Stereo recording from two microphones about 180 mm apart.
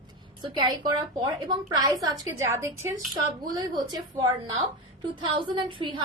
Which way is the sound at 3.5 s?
20° right (ahead or behind).